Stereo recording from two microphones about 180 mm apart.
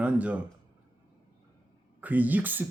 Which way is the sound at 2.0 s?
10° right (ahead or behind).